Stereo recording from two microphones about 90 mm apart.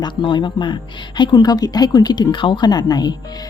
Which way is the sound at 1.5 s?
45° left (ahead or behind).